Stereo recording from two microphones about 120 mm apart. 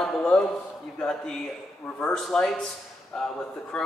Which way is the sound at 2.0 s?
5° left (ahead or behind).